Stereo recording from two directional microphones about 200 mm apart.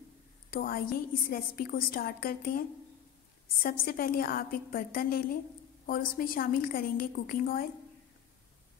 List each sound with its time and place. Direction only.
0.5 s a woman's voice: 45° left (ahead or behind)
3.6 s a woman's voice: 45° left (ahead or behind)